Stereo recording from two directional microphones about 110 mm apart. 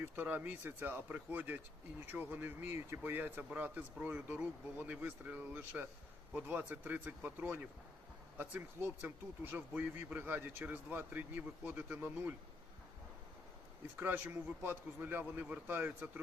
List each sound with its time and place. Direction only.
0.0 s speech: 15° right (ahead or behind)
14.0 s speech: 15° right (ahead or behind)